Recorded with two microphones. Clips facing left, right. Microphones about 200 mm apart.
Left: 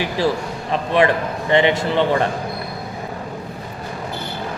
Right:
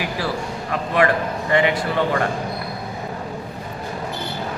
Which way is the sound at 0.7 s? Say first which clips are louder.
Left 2 dB; 25° left (ahead or behind).